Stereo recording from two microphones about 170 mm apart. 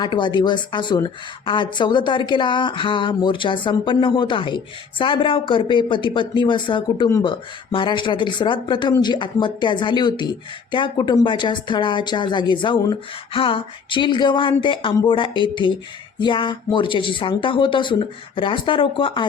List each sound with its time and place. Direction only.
0.0 s speech: 25° left (ahead or behind)